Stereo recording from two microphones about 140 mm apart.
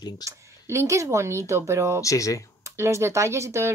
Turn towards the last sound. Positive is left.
turn(degrees=-20)  # may be behind; listen again after turning